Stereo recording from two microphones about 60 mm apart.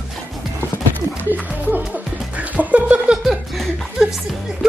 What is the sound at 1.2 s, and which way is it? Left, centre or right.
Music, right.